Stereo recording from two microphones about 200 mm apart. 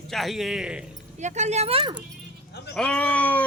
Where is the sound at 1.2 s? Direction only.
35° right (ahead or behind).